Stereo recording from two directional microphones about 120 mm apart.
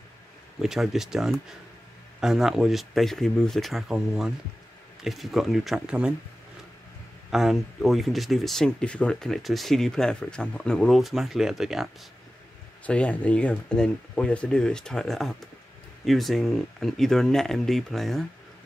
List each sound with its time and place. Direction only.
0.6 s speech: 5° right (ahead or behind)
7.2 s speech: 5° right (ahead or behind)
12.8 s speech: 10° left (ahead or behind)